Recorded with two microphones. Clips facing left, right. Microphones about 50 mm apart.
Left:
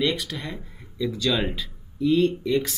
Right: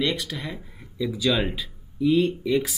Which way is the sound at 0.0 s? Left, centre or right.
Centre.